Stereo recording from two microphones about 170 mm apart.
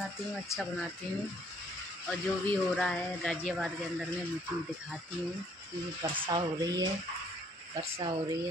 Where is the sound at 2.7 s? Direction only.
5° left (ahead or behind).